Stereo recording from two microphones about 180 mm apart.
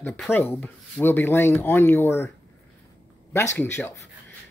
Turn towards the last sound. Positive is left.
turn(degrees=15)  # may be behind; listen again after turning